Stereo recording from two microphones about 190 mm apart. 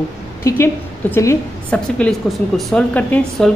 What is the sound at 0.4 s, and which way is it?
A woman's voice, 15° left (ahead or behind).